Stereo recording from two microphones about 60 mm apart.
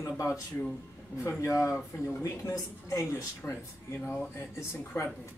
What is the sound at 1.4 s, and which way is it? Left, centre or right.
Speech, left.